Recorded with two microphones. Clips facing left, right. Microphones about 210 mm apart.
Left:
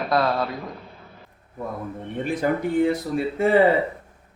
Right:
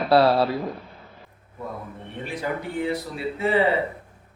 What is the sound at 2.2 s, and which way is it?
A man's voice, 50° left (ahead or behind).